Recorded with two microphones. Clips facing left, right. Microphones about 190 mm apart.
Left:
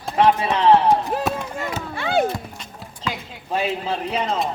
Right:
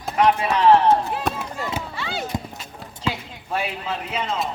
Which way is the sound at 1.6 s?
55° left (ahead or behind).